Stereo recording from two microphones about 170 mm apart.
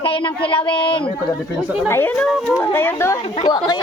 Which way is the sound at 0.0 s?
30° left (ahead or behind).